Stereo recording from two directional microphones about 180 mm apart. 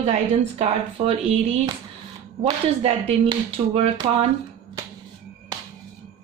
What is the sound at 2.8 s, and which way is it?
A woman's voice, 35° right (ahead or behind).